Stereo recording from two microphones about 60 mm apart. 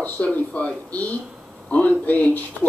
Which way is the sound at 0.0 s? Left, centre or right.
Left.